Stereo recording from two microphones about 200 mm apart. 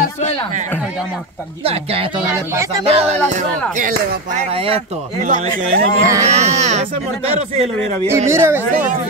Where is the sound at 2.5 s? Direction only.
15° right (ahead or behind).